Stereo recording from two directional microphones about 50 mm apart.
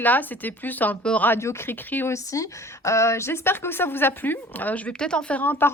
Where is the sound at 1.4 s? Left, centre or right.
Left.